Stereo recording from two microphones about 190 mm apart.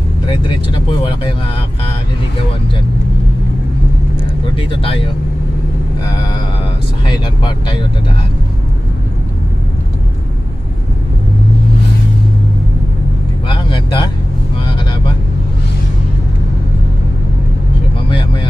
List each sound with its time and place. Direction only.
4.6 s speech: 30° left (ahead or behind)
7.1 s speech: 20° left (ahead or behind)
13.5 s vehicle: 25° left (ahead or behind)
18.1 s vehicle: 25° left (ahead or behind)